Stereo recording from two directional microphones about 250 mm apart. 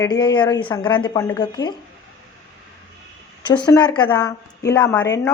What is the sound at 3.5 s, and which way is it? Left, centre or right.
A woman's voice, centre.